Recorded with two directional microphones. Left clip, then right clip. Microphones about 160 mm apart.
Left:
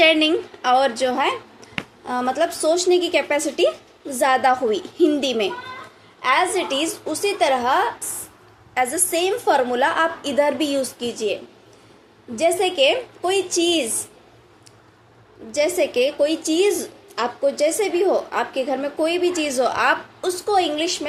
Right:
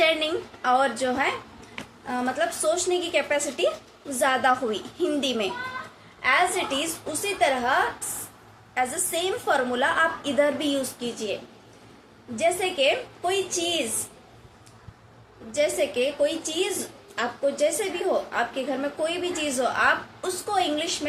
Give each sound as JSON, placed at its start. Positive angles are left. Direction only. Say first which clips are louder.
{"t": 0.0, "sound": "a woman's voice", "louder": "left 7 dB", "side_deg": 35}
{"t": 12.4, "sound": "a woman's voice", "louder": "left 5 dB", "side_deg": 40}
{"t": 15.5, "sound": "a woman's voice", "louder": "left 5 dB", "side_deg": 40}